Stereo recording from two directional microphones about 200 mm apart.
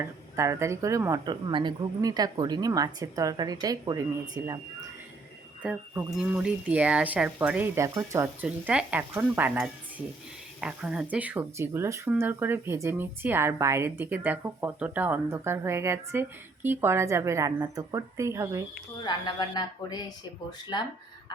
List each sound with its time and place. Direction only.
0.0 s speech: 15° right (ahead or behind)
5.6 s speech: 5° right (ahead or behind)
8.4 s speech: 5° right (ahead or behind)
19.0 s speech: 20° left (ahead or behind)